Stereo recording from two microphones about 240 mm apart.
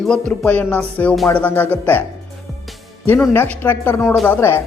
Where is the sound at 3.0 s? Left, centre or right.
Centre.